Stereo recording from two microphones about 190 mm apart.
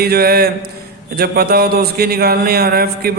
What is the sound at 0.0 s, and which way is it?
A man's voice, 55° right (ahead or behind).